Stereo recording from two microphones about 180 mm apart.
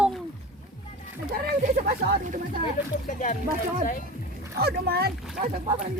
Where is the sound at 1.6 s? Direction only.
45° right (ahead or behind).